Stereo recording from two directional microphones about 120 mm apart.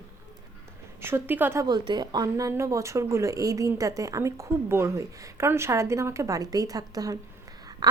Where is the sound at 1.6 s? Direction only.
35° right (ahead or behind).